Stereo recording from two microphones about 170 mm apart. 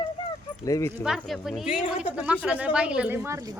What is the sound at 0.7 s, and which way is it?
Speech, 20° left (ahead or behind).